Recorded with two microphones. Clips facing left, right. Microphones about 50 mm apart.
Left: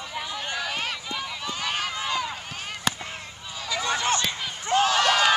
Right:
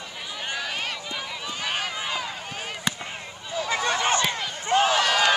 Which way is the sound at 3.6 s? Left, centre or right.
Right.